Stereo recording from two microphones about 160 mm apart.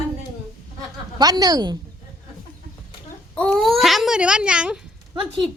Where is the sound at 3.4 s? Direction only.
5° left (ahead or behind).